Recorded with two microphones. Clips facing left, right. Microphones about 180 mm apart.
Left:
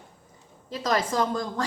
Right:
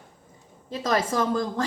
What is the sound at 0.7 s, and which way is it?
Speech, 25° right (ahead or behind).